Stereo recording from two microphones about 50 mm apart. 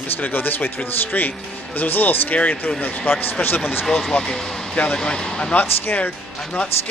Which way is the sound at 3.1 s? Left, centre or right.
Left.